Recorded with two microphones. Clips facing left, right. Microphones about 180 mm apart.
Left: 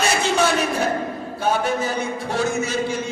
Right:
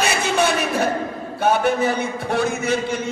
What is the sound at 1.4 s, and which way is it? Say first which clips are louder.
A man's voice: right 4 dB; 60° right (ahead or behind).